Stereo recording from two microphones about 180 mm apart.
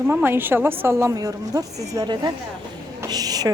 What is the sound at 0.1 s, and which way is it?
A woman's voice, 10° right (ahead or behind).